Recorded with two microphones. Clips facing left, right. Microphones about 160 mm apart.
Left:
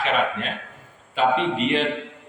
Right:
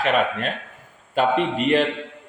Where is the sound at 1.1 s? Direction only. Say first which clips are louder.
Right 1 dB; 45° right (ahead or behind).